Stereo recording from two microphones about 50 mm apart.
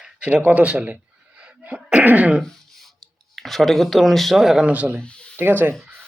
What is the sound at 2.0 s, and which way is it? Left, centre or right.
Speech, right.